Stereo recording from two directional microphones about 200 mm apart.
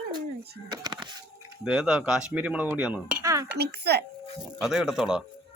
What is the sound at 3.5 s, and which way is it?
Speech, 55° right (ahead or behind).